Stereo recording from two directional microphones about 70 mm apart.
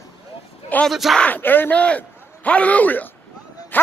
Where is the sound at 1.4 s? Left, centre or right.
Left.